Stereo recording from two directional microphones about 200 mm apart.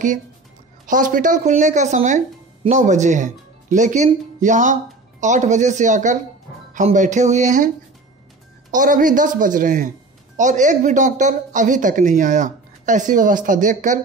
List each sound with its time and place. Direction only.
0.8 s speech: 40° right (ahead or behind)
8.7 s speech: 40° right (ahead or behind)